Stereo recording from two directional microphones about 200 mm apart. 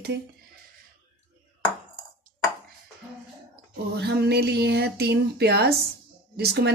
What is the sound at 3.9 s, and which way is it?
A woman's voice, 55° right (ahead or behind).